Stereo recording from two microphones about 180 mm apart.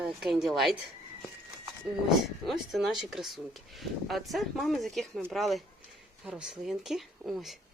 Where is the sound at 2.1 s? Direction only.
Centre (ahead or behind).